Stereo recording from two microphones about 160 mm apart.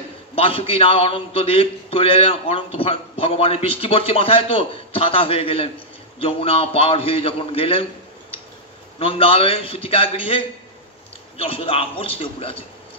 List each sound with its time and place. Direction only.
0.4 s a man's voice: 35° left (ahead or behind)
9.0 s a man's voice: 35° left (ahead or behind)